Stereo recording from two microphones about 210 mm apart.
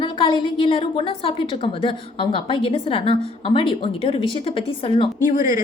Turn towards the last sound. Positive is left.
turn(degrees=40)  # may be behind; listen again after turning